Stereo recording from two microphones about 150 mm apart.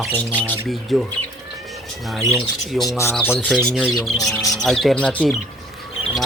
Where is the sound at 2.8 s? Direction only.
20° left (ahead or behind).